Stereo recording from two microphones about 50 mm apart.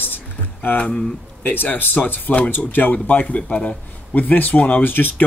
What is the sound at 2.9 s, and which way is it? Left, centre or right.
Speech, left.